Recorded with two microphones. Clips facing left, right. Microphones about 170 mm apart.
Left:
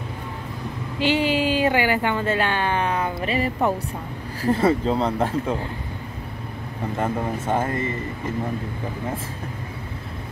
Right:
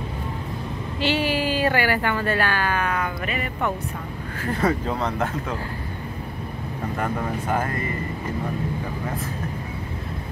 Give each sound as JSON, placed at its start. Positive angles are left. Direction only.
{"t": 0.9, "sound": "speech", "side_deg": 15}
{"t": 7.0, "sound": "speech", "side_deg": 25}